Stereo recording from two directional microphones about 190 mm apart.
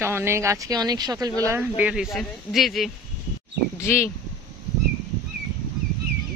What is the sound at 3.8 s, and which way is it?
Speech, 15° left (ahead or behind).